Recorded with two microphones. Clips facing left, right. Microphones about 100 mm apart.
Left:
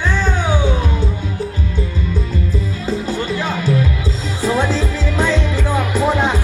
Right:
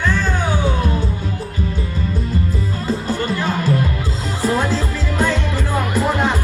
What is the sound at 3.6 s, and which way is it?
Music, 45° right (ahead or behind).